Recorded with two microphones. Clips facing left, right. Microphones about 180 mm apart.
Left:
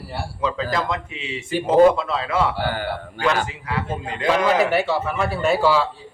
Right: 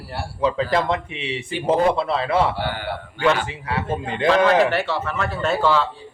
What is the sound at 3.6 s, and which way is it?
Speech, 30° right (ahead or behind).